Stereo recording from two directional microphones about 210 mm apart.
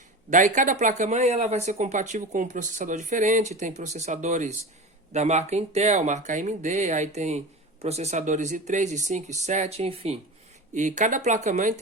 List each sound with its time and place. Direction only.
0.3 s speech: 40° right (ahead or behind)